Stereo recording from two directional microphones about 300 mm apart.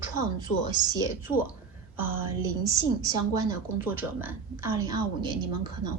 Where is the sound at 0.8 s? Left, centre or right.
Centre.